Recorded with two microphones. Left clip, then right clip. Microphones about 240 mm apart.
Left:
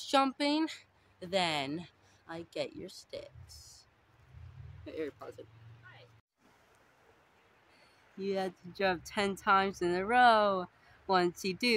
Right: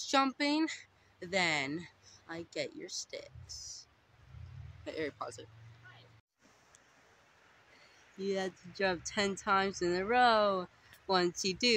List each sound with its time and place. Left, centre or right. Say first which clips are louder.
0.0 s speech: left 1 dB; centre
4.8 s speech: right 2 dB; right
8.2 s speech: left 1 dB; centre